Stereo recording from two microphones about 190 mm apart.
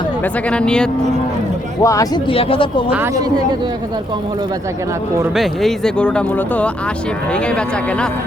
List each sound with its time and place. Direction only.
0.5 s speech: 5° left (ahead or behind)
1.8 s speech: 15° left (ahead or behind)
2.3 s speech: 30° left (ahead or behind)
2.9 s speech: 15° right (ahead or behind)
5.2 s speech: centre (ahead or behind)